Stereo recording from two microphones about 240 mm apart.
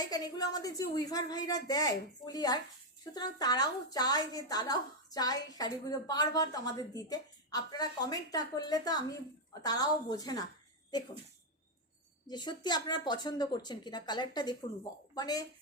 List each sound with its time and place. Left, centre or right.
0.0 s a woman's voice: centre
12.3 s a woman's voice: centre